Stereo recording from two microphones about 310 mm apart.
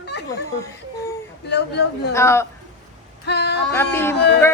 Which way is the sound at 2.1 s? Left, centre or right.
Centre.